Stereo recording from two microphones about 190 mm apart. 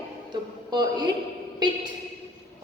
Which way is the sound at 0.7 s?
20° right (ahead or behind).